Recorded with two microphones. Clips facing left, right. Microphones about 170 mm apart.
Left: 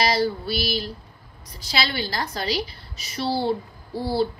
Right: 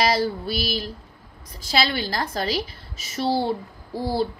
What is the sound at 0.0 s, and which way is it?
Speech, 50° right (ahead or behind).